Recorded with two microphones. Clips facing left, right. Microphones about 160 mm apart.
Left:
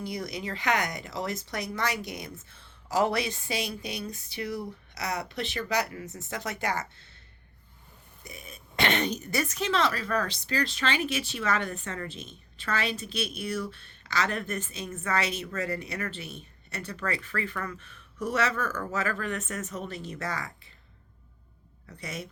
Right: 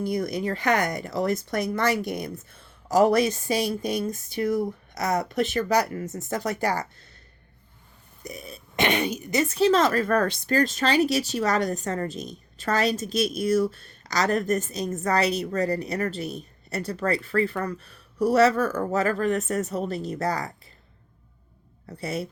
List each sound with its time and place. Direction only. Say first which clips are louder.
0.0 s speech: right 8 dB; 50° right (ahead or behind)
8.2 s speech: right 8 dB; 40° right (ahead or behind)
8.7 s speech: right 3 dB; 15° right (ahead or behind)
9.6 s speech: right 9 dB; 40° right (ahead or behind)
21.8 s speech: right 8 dB; 35° right (ahead or behind)